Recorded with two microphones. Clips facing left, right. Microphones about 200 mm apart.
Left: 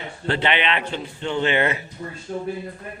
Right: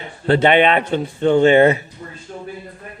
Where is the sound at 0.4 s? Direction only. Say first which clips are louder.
Right 9 dB; 45° right (ahead or behind).